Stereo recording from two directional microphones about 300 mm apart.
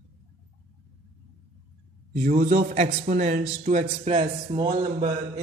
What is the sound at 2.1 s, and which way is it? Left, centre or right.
A man's voice, right.